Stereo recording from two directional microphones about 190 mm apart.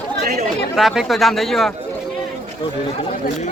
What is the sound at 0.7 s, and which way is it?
Speech, centre (ahead or behind).